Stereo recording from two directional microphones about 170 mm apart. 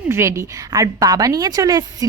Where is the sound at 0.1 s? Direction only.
15° right (ahead or behind).